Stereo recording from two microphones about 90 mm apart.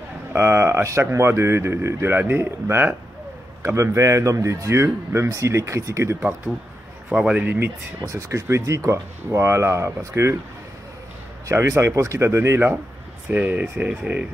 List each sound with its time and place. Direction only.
0.3 s speech: 30° right (ahead or behind)
3.6 s speech: 35° right (ahead or behind)
7.1 s speech: 10° right (ahead or behind)
7.4 s speech: 25° right (ahead or behind)
8.0 s speech: 35° right (ahead or behind)
11.4 s speech: 35° right (ahead or behind); by 14.2 s 15° right (ahead or behind)